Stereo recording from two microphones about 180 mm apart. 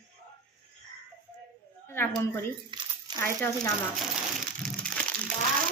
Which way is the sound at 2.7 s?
25° right (ahead or behind).